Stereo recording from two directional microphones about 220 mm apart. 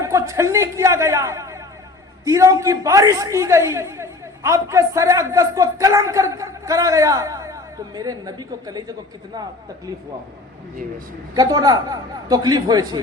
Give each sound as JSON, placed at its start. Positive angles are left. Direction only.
{"t": 0.0, "sound": "a man's voice", "side_deg": -15}
{"t": 11.3, "sound": "a man's voice", "side_deg": -15}